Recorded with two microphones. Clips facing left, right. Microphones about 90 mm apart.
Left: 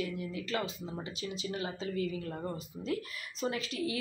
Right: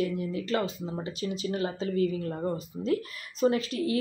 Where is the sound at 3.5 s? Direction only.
40° right (ahead or behind).